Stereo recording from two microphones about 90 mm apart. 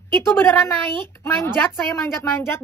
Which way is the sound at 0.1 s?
25° left (ahead or behind).